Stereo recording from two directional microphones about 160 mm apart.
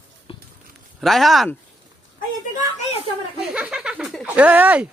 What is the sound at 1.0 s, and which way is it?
Speech, centre (ahead or behind).